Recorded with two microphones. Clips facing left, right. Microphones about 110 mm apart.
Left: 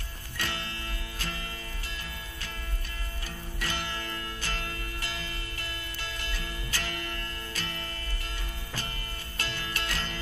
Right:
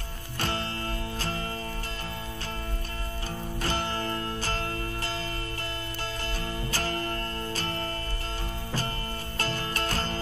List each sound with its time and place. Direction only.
0.4 s music: 35° right (ahead or behind)
3.6 s music: 35° right (ahead or behind)
6.2 s music: 40° right (ahead or behind)
9.4 s music: 40° right (ahead or behind)